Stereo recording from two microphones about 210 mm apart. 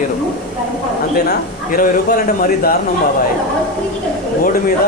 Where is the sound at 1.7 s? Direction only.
45° left (ahead or behind).